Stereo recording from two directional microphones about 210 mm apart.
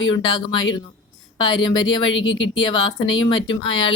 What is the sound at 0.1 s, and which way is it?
Speech, 20° left (ahead or behind).